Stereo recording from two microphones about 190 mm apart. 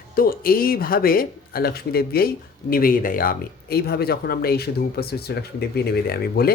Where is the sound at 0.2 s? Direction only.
50° left (ahead or behind).